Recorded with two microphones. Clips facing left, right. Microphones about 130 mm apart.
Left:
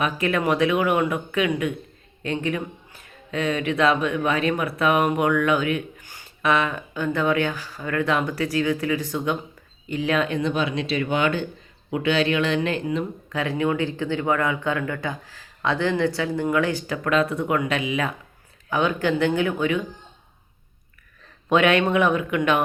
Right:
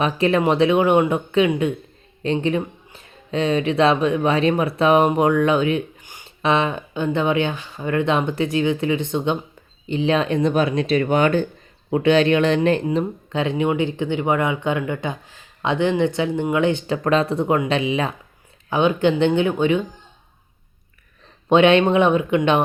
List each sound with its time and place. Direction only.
0.0 s speech: 30° right (ahead or behind)
13.4 s speech: 20° right (ahead or behind)
21.5 s speech: 25° right (ahead or behind)